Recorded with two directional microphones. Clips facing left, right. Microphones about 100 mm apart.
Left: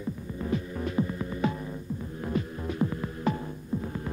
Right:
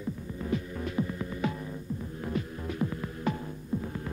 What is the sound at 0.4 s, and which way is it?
Music, 30° left (ahead or behind).